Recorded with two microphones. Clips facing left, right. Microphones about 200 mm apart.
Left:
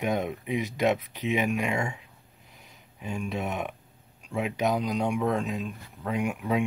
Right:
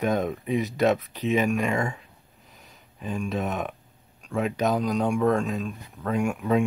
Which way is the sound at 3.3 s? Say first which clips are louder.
Right 3 dB; 15° left (ahead or behind).